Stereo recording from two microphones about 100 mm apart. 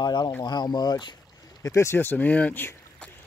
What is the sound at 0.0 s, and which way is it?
Speech, 45° left (ahead or behind).